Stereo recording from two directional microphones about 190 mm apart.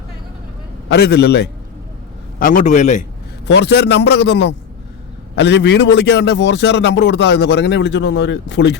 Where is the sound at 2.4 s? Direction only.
45° left (ahead or behind).